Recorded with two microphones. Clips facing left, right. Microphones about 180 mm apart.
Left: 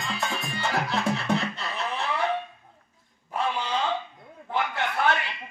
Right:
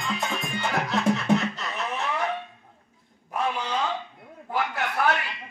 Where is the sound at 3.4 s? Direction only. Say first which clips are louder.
Even; 30° left (ahead or behind).